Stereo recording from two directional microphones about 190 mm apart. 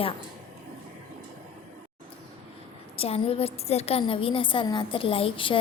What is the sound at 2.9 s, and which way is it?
A woman's voice, 30° left (ahead or behind).